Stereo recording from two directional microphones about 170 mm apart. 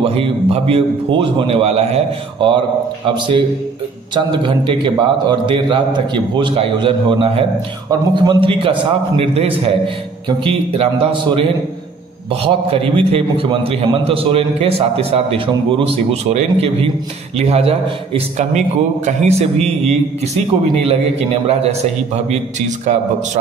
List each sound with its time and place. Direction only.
0.0 s a man's voice: 35° right (ahead or behind)
12.4 s a man's voice: 35° right (ahead or behind)